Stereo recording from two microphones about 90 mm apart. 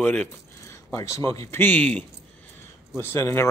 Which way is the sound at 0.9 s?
35° left (ahead or behind).